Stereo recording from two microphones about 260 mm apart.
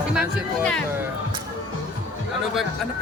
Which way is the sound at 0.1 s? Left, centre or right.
Centre.